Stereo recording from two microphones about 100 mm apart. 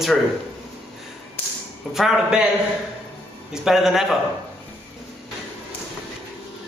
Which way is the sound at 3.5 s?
5° right (ahead or behind).